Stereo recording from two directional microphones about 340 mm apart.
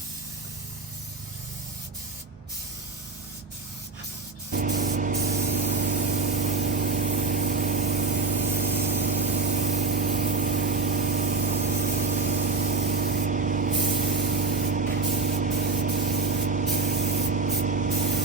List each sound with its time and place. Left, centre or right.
4.5 s spray: right